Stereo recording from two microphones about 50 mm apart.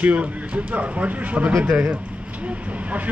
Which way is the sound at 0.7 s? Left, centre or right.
Right.